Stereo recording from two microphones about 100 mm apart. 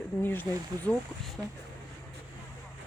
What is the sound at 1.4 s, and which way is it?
Speech, 10° right (ahead or behind).